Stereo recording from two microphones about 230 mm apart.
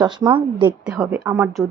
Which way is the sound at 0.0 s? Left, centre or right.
Centre.